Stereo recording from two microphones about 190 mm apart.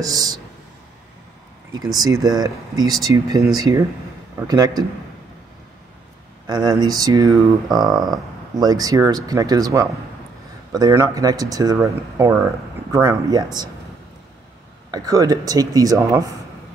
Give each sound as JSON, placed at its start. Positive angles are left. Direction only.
{"t": 0.0, "sound": "speech", "side_deg": -20}
{"t": 2.0, "sound": "speech", "side_deg": -20}
{"t": 6.4, "sound": "speech", "side_deg": -20}
{"t": 14.9, "sound": "speech", "side_deg": -20}